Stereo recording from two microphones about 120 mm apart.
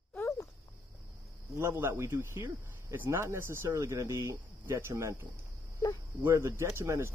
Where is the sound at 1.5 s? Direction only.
20° right (ahead or behind).